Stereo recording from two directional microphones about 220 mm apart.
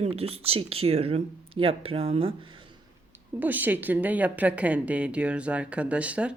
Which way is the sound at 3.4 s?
10° right (ahead or behind).